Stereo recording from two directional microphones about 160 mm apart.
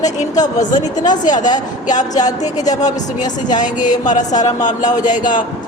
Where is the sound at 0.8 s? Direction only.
50° left (ahead or behind).